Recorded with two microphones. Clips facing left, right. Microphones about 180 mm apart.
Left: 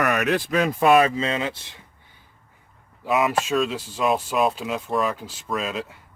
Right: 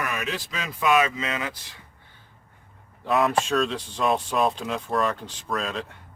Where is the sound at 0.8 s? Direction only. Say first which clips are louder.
Left 4 dB; 40° left (ahead or behind).